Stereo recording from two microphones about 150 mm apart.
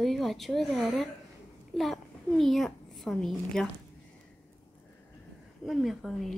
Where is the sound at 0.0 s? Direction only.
Centre (ahead or behind).